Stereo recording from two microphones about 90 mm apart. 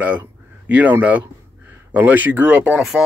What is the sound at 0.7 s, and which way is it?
Speech, 15° right (ahead or behind).